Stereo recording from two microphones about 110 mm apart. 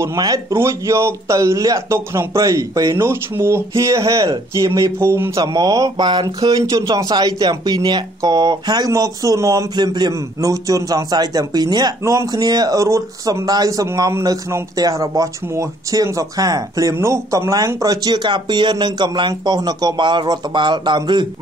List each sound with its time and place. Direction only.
0.0 s speech: 30° right (ahead or behind)
3.1 s speech: 20° right (ahead or behind)
5.4 s speech: 35° right (ahead or behind)
9.8 s speech: 40° right (ahead or behind)